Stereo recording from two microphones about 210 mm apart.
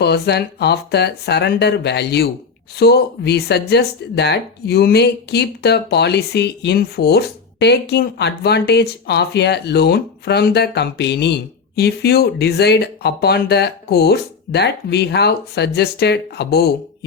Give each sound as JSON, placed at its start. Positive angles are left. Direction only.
{"t": 0.0, "sound": "speech", "side_deg": 50}